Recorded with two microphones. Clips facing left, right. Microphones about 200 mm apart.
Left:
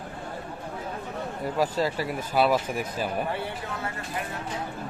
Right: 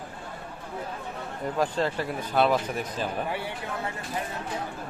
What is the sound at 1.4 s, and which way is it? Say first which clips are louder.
Speech: even; 10° left (ahead or behind).